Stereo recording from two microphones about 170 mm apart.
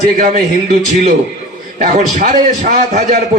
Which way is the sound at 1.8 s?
45° right (ahead or behind).